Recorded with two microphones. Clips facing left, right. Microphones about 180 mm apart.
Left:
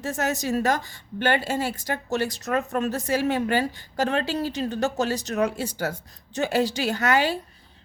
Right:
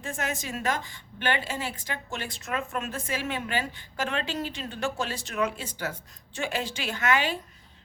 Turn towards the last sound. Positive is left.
turn(degrees=40)  # may be behind; listen again after turning